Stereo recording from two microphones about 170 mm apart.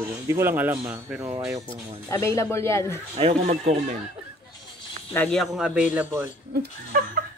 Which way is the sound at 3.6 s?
40° right (ahead or behind).